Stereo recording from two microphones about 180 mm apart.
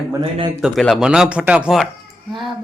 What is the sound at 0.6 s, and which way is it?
Speech, centre (ahead or behind).